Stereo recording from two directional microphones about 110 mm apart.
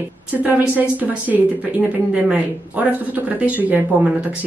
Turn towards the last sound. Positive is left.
turn(degrees=-15)  # may be behind; listen again after turning